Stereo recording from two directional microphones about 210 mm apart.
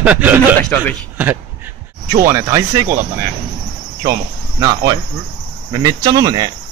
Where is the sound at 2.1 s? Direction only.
15° right (ahead or behind).